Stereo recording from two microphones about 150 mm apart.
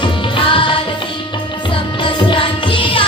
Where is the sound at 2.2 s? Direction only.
35° left (ahead or behind).